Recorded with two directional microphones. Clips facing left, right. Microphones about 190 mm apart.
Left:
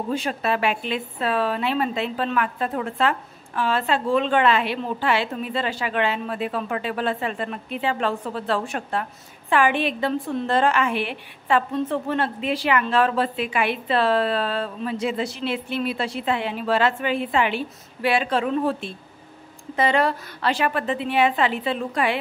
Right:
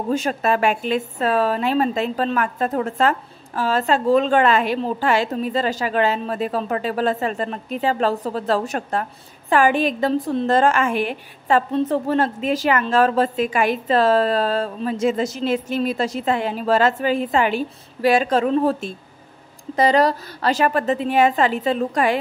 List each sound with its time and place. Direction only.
0.1 s a woman's voice: 45° right (ahead or behind)